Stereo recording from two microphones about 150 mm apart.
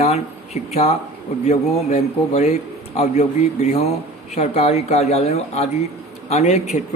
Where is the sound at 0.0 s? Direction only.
45° left (ahead or behind).